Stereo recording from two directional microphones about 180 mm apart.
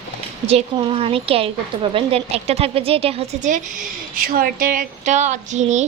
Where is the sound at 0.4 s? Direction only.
35° right (ahead or behind).